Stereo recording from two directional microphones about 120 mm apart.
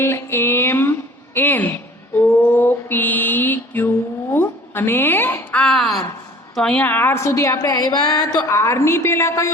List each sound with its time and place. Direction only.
0.0 s a sound: 20° left (ahead or behind)
2.1 s mantra: 15° left (ahead or behind)
6.6 s a woman's voice: 10° left (ahead or behind); by 9.5 s 25° left (ahead or behind)